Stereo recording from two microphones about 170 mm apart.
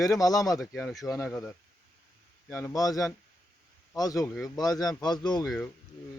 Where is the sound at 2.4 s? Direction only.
15° left (ahead or behind).